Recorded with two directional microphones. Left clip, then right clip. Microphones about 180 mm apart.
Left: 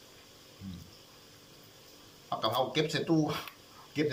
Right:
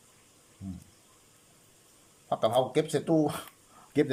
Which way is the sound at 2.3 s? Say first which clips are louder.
Right 4 dB; 50° right (ahead or behind).